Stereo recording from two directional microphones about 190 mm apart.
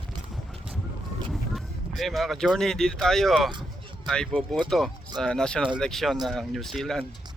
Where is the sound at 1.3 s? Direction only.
Centre (ahead or behind).